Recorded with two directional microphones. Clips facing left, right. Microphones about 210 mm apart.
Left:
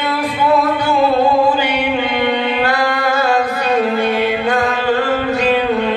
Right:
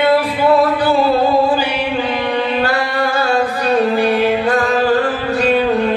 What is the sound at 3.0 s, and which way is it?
Music, 35° right (ahead or behind).